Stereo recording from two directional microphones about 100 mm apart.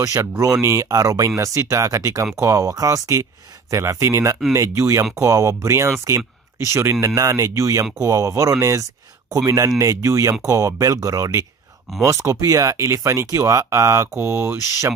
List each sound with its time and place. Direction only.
0.0 s speech: 35° right (ahead or behind)